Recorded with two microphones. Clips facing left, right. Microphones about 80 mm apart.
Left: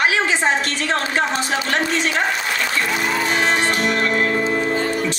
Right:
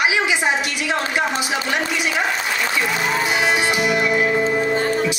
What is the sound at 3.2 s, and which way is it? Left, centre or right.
Music, centre.